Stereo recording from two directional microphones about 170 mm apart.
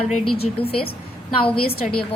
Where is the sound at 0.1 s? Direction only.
35° left (ahead or behind).